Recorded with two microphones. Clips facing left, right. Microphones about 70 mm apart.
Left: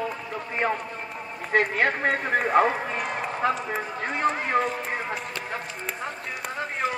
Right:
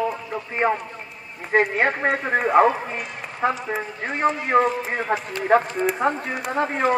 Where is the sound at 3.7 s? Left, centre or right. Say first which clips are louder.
Right 1 dB; centre.